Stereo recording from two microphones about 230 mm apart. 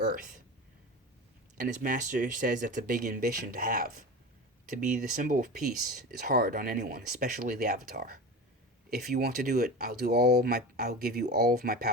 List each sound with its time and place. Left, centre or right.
0.0 s speech: right
1.5 s speech: right